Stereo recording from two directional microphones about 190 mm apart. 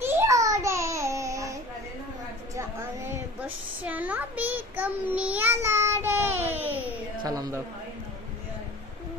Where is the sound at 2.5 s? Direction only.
15° right (ahead or behind).